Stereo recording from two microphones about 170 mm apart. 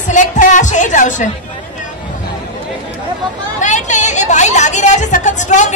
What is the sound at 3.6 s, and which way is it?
A woman's voice, 45° left (ahead or behind).